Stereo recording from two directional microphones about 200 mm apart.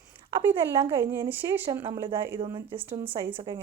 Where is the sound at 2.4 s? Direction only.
25° right (ahead or behind).